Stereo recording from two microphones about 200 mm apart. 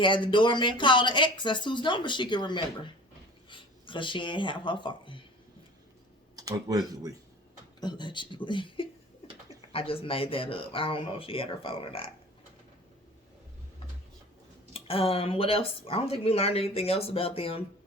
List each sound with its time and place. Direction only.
0.0 s speech: 25° left (ahead or behind)
6.3 s speech: 15° right (ahead or behind)
7.8 s speech: 20° left (ahead or behind)
14.7 s speech: 30° left (ahead or behind)